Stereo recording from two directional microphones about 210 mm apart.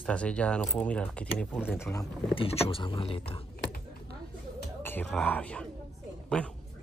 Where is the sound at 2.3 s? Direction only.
25° left (ahead or behind).